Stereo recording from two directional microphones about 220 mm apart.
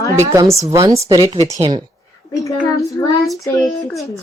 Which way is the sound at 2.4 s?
15° left (ahead or behind).